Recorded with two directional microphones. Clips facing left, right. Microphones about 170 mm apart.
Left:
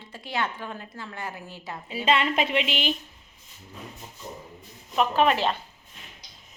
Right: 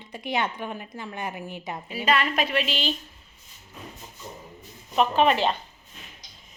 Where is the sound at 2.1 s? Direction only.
25° left (ahead or behind).